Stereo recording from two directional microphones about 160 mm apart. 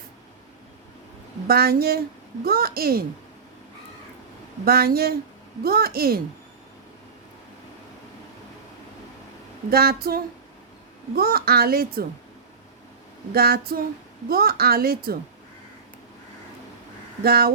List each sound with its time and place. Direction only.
1.5 s a woman's voice: 75° right (ahead or behind)
4.6 s a woman's voice: 70° right (ahead or behind)
9.6 s a woman's voice: 75° right (ahead or behind)
13.3 s a woman's voice: 75° right (ahead or behind)
17.2 s a woman's voice: 75° right (ahead or behind)